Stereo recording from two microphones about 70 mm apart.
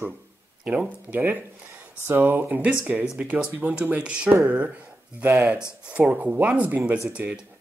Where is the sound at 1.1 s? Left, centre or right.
Right.